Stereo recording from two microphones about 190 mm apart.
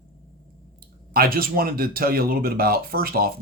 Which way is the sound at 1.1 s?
50° right (ahead or behind).